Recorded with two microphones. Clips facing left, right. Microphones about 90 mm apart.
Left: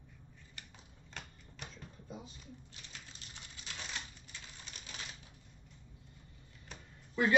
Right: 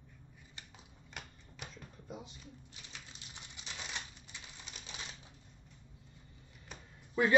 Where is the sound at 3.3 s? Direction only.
20° right (ahead or behind).